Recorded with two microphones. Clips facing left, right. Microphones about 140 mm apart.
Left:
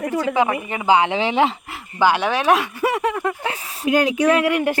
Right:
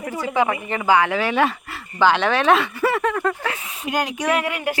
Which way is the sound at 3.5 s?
35° left (ahead or behind).